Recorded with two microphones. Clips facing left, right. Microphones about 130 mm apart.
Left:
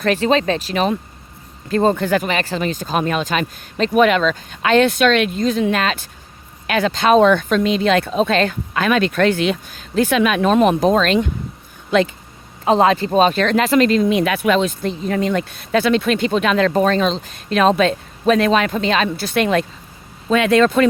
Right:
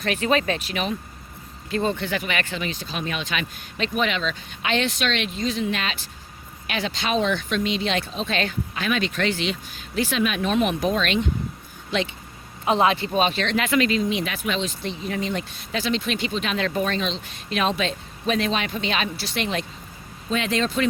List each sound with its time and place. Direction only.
0.0 s speech: 35° left (ahead or behind)
3.9 s speech: 50° left (ahead or behind)
10.1 s speech: 60° left (ahead or behind)
10.4 s speech: 40° left (ahead or behind)
14.0 s speech: 55° left (ahead or behind)
19.0 s speech: 50° left (ahead or behind)